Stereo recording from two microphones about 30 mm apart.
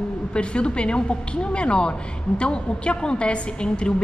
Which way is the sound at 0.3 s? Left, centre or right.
Left.